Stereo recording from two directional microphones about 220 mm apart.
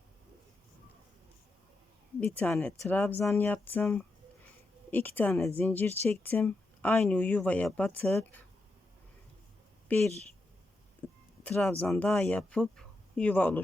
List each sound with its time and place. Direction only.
2.2 s speech: 5° left (ahead or behind)
9.9 s speech: 5° left (ahead or behind)
11.0 s a sound: 5° left (ahead or behind)
11.4 s speech: 5° left (ahead or behind)